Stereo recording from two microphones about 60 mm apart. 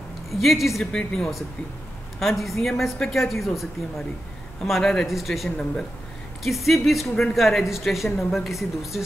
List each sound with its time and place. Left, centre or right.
0.3 s a woman's voice: centre
4.6 s a woman's voice: centre